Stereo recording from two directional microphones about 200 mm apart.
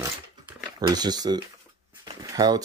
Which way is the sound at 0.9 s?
20° right (ahead or behind).